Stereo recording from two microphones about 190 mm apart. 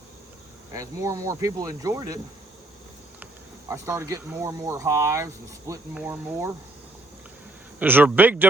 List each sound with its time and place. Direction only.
0.7 s speech: 20° right (ahead or behind)
3.7 s speech: 15° right (ahead or behind)
7.8 s speech: 10° right (ahead or behind)